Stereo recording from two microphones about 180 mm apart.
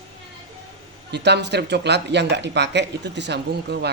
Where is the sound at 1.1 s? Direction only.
70° right (ahead or behind).